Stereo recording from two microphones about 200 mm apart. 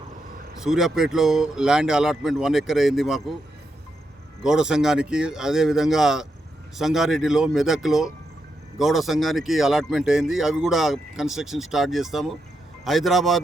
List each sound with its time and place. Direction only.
0.6 s speech: centre (ahead or behind)
4.4 s speech: 5° right (ahead or behind)